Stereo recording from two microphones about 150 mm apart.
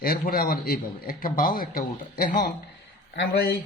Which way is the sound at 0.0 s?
85° left.